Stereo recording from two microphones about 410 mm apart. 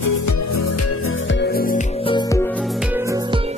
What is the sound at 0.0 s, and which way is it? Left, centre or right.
Music, left.